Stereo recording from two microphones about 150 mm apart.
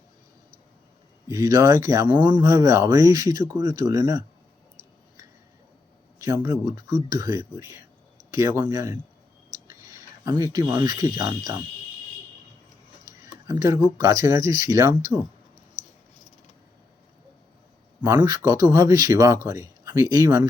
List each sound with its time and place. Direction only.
1.3 s speech: 25° right (ahead or behind)
6.1 s speech: 20° right (ahead or behind)
13.1 s speech: 20° right (ahead or behind)
18.0 s speech: 15° right (ahead or behind)